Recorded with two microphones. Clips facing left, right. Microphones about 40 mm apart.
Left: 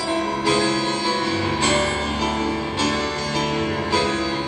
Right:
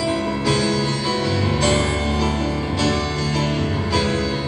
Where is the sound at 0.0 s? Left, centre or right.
Left; by 2.5 s centre.